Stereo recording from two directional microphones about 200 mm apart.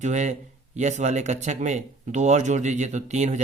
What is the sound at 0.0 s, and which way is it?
Speech, 35° right (ahead or behind).